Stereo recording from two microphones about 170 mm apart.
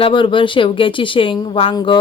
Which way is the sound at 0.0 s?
30° left (ahead or behind).